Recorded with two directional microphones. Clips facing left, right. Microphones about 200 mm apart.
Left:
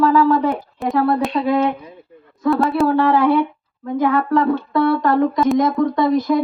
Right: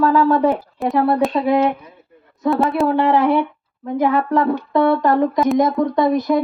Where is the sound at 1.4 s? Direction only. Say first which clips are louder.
Even; 15° right (ahead or behind).